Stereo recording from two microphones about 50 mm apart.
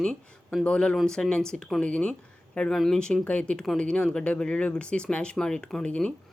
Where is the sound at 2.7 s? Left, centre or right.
Centre.